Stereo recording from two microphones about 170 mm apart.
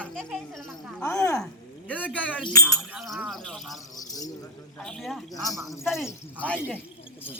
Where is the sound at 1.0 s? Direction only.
20° left (ahead or behind).